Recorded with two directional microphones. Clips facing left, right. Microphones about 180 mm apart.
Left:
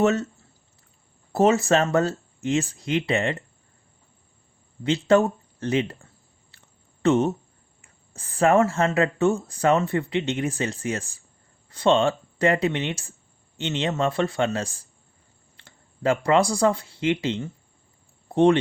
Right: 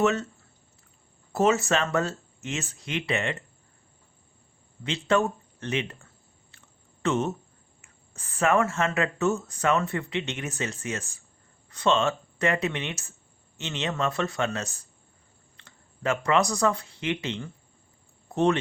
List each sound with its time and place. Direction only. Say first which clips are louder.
0.0 s speech: left 3 dB; 40° left (ahead or behind)
1.3 s speech: left 4 dB; 35° left (ahead or behind)
4.8 s speech: left 6 dB; 35° left (ahead or behind)
6.5 s chewing: right 1 dB; 35° left (ahead or behind)
7.8 s speech: left 4 dB; 35° left (ahead or behind)